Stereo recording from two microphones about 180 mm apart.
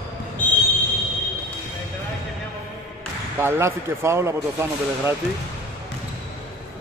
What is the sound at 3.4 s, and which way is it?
Speech, 15° right (ahead or behind).